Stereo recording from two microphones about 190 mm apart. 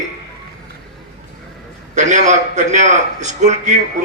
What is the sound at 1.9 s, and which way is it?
Speech, 40° right (ahead or behind).